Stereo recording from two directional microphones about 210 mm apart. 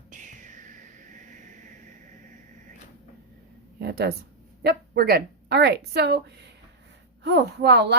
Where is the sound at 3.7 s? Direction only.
50° right (ahead or behind).